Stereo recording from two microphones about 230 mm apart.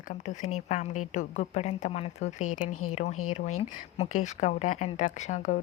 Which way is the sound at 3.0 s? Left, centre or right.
Left.